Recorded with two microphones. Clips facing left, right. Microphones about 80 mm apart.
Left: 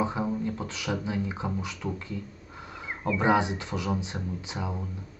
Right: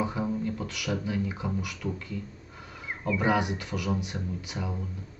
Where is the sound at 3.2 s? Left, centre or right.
Left.